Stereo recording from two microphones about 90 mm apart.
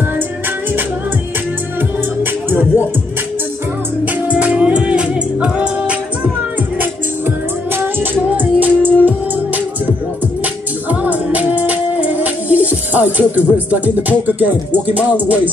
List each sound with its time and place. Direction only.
4.0 s music: 15° right (ahead or behind)